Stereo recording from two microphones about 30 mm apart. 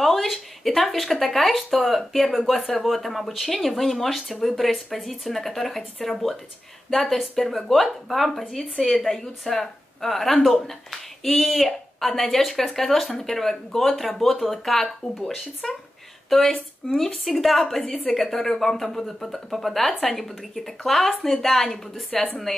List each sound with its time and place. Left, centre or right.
0.0 s a woman's voice: centre
8.8 s a woman's voice: centre